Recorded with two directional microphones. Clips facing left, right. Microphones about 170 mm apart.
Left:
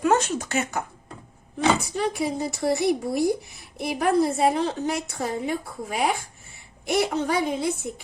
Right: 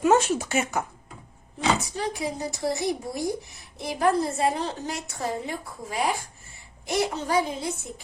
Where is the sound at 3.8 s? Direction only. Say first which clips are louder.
Left 2 dB; 65° left (ahead or behind).